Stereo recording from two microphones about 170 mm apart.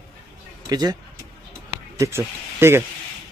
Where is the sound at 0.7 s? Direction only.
25° right (ahead or behind).